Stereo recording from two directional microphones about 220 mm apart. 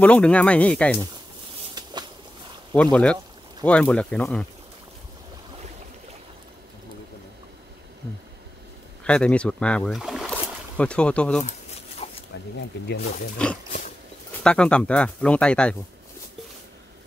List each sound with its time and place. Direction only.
0.0 s speech: 5° left (ahead or behind)
1.8 s a sound: 20° right (ahead or behind)
2.7 s speech: 5° left (ahead or behind)
9.0 s speech: 5° left (ahead or behind)
11.4 s dog: 30° left (ahead or behind)
12.5 s speech: 50° left (ahead or behind)
13.4 s speech: 5° left (ahead or behind)